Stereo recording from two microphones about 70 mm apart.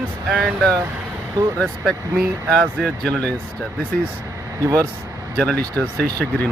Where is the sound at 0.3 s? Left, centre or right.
Centre.